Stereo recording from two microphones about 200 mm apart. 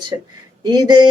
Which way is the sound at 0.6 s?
20° right (ahead or behind).